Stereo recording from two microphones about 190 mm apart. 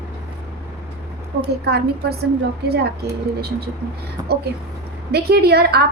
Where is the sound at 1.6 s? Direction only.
60° right (ahead or behind).